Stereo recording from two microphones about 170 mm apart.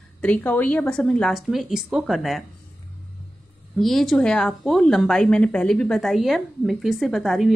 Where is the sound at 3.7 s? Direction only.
Centre (ahead or behind).